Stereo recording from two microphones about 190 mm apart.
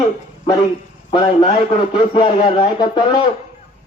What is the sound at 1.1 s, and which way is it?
Speech, 25° left (ahead or behind).